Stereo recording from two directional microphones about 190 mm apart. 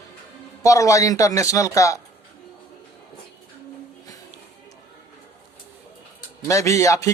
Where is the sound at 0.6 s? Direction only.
15° left (ahead or behind).